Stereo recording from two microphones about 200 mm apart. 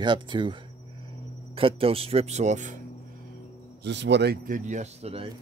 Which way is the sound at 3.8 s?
60° right (ahead or behind).